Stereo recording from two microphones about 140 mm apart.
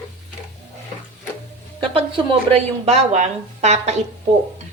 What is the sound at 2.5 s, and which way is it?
Speech, 50° right (ahead or behind).